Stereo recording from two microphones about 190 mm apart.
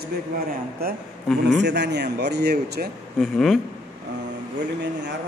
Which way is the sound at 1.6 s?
65° right (ahead or behind).